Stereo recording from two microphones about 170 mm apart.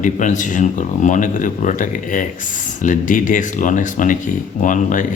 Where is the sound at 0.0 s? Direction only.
45° left (ahead or behind).